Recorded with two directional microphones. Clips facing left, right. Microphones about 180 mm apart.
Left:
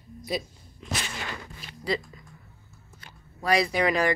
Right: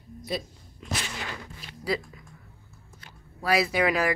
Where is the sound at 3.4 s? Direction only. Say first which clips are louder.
Even; 5° right (ahead or behind).